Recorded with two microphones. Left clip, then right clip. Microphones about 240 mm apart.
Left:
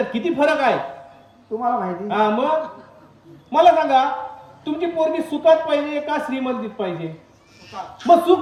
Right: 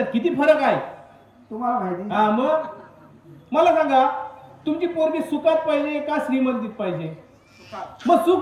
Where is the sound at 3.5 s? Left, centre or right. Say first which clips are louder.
Left 3 dB; left.